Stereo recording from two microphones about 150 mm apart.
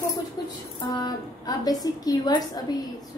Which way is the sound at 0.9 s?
25° left (ahead or behind).